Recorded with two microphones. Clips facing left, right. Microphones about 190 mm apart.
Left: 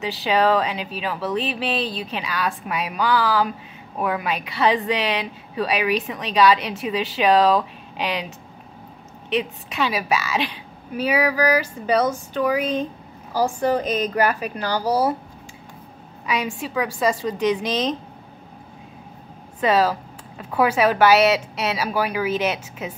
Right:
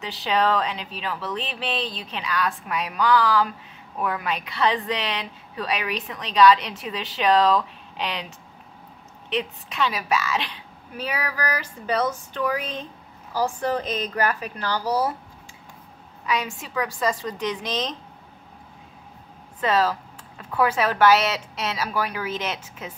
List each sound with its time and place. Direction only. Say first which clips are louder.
0.0 s a woman's voice: left 3 dB; 10° left (ahead or behind)
9.3 s a woman's voice: left 4 dB; 10° left (ahead or behind)
14.8 s speech: left 4 dB; 30° left (ahead or behind)
16.3 s a woman's voice: left 2 dB; 10° left (ahead or behind)
19.6 s a woman's voice: left 3 dB; 10° left (ahead or behind)